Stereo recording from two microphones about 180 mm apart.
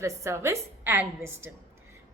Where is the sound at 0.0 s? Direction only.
15° right (ahead or behind).